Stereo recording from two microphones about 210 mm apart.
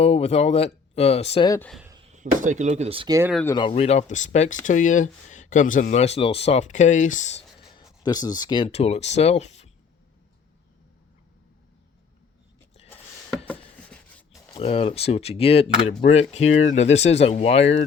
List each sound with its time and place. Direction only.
0.0 s speech: 30° left (ahead or behind)
1.5 s speech: 10° left (ahead or behind)
2.0 s speech: 35° right (ahead or behind)
3.4 s speech: 20° left (ahead or behind)
8.0 s speech: 20° left (ahead or behind)
13.9 s a sound: 5° left (ahead or behind)
14.5 s speech: 25° left (ahead or behind)